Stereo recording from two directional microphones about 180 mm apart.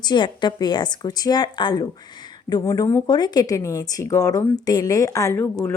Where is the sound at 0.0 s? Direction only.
25° left (ahead or behind).